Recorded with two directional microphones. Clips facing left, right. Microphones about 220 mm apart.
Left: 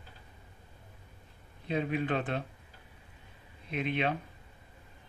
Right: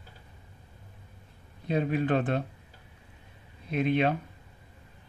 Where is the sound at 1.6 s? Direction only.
40° right (ahead or behind).